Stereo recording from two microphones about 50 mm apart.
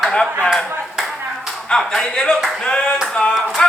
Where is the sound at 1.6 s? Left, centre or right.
Centre.